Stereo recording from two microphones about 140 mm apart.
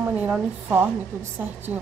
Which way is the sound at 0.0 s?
10° right (ahead or behind).